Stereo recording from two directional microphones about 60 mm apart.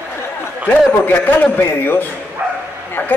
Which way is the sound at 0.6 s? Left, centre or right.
Left.